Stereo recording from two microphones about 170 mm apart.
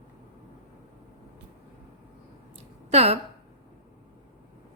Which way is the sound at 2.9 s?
35° right (ahead or behind).